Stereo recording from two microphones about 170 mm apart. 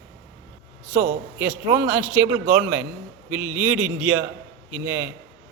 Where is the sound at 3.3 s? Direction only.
15° right (ahead or behind).